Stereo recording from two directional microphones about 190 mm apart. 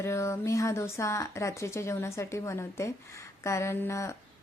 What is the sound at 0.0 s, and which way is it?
A woman's voice, 15° left (ahead or behind).